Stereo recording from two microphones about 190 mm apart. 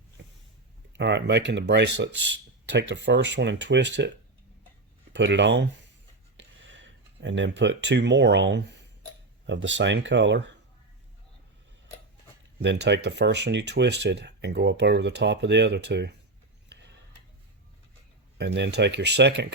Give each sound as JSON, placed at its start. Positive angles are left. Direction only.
{"t": 0.9, "sound": "speech", "side_deg": -65}
{"t": 5.1, "sound": "speech", "side_deg": -70}
{"t": 12.6, "sound": "speech", "side_deg": -65}
{"t": 16.6, "sound": "a sound", "side_deg": -65}
{"t": 18.3, "sound": "speech", "side_deg": -65}